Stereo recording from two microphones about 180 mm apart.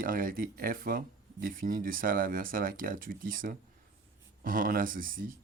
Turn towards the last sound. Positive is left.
turn(degrees=-50)  # may be behind; listen again after turning